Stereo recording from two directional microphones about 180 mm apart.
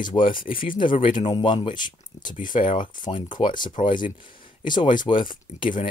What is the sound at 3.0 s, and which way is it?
Speech, 25° left (ahead or behind).